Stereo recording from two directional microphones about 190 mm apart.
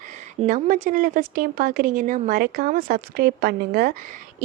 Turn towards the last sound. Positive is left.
turn(degrees=-50)  # may be behind; listen again after turning